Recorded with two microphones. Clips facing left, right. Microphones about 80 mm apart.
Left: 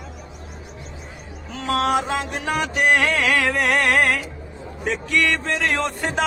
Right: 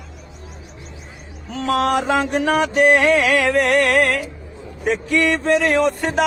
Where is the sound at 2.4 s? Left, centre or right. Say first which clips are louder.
Right 5 dB; right.